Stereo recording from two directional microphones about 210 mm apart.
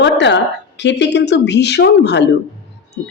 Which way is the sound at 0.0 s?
55° left (ahead or behind).